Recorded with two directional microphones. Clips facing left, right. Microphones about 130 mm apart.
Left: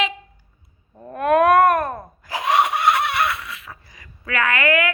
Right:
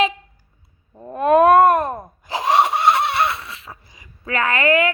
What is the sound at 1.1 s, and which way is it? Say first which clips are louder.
Giggle: right 3 dB; 30° right (ahead or behind).